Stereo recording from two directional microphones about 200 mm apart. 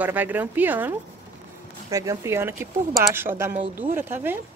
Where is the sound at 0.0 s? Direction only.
10° right (ahead or behind).